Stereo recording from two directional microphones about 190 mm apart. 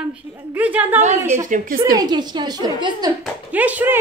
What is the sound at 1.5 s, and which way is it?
Speech, 45° right (ahead or behind).